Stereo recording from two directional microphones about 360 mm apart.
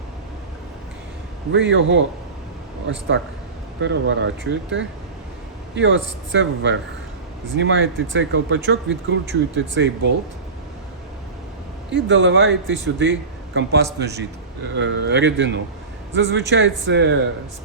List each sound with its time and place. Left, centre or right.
1.5 s speech: right
11.9 s speech: right